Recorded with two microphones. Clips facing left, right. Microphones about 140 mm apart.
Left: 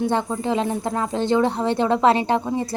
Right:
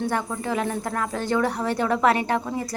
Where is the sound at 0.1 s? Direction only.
25° left (ahead or behind).